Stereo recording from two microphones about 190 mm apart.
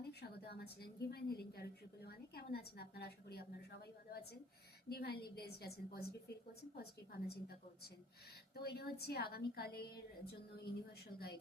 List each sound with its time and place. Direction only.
0.1 s a woman's voice: 60° left (ahead or behind)
8.5 s a woman's voice: 55° left (ahead or behind)